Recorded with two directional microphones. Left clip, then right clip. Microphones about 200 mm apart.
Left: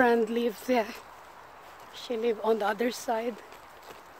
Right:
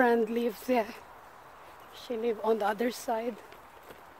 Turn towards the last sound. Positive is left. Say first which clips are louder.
# left 2 dB
turn(degrees=0)  # may be behind; listen again after turning